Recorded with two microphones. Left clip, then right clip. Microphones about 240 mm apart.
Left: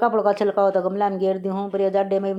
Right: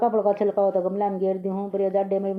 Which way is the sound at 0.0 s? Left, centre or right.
Left.